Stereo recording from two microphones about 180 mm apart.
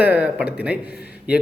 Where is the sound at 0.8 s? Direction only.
60° left (ahead or behind).